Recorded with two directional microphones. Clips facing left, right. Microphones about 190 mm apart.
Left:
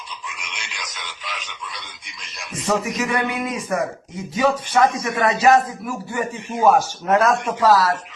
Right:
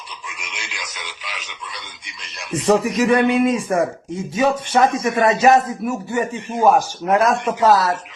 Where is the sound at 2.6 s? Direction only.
35° right (ahead or behind).